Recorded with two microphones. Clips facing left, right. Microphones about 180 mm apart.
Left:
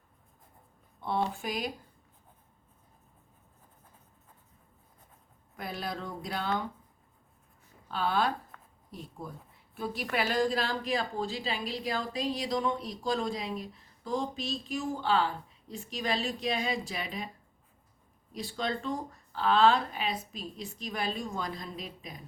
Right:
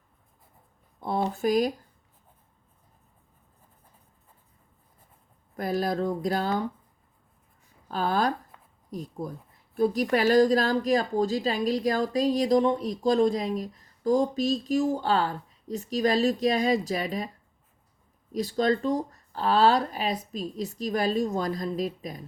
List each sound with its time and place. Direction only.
1.0 s a woman's voice: 40° right (ahead or behind)
5.5 s a woman's voice: 40° right (ahead or behind)
7.9 s a woman's voice: 40° right (ahead or behind)
18.3 s a woman's voice: 40° right (ahead or behind)